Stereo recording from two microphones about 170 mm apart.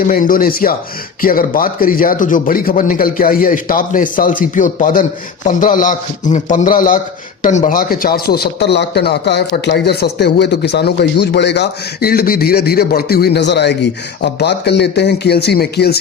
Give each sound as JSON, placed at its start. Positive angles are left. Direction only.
{"t": 0.1, "sound": "a man's voice", "side_deg": 55}